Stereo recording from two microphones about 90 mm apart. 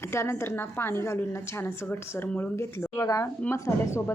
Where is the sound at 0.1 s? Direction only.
30° left (ahead or behind).